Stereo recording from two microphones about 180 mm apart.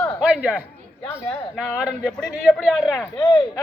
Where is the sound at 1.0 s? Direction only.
10° left (ahead or behind).